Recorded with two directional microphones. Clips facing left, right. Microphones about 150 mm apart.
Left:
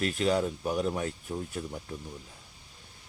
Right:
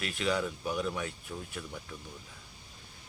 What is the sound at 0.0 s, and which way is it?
A man's voice, 40° left (ahead or behind).